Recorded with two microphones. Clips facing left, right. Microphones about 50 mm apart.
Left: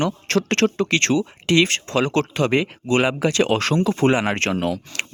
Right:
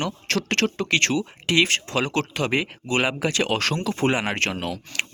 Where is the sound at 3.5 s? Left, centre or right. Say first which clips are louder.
Left 5 dB; centre.